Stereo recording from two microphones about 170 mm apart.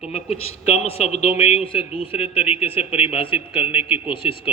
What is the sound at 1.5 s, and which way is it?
A man's voice, 35° left (ahead or behind).